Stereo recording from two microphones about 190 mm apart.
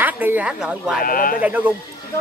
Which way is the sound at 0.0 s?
10° right (ahead or behind).